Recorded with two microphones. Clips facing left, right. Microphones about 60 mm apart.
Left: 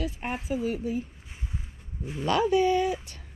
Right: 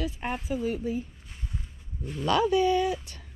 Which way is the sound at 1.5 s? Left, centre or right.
Centre.